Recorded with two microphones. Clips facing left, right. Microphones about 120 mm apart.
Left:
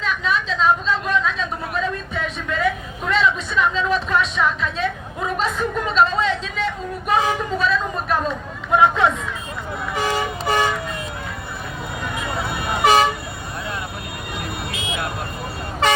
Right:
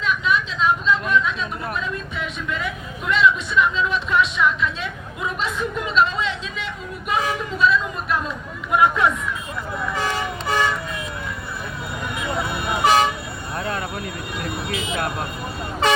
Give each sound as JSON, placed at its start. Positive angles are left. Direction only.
{"t": 0.0, "sound": "a sound", "side_deg": 35}
{"t": 8.7, "sound": "hubbub", "side_deg": 25}
{"t": 9.9, "sound": "toot", "side_deg": 10}
{"t": 12.4, "sound": "toot", "side_deg": 0}